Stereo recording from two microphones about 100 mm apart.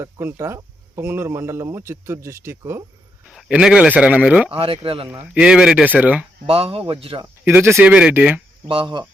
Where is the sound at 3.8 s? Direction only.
15° right (ahead or behind).